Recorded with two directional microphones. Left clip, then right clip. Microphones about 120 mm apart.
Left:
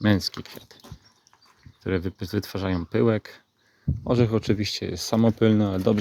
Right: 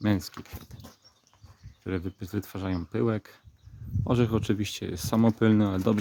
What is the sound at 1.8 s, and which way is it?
Speech, 20° left (ahead or behind).